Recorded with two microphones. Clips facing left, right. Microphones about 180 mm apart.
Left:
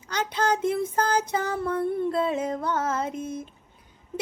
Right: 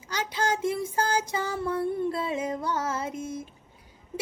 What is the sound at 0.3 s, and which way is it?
Music, 55° left (ahead or behind).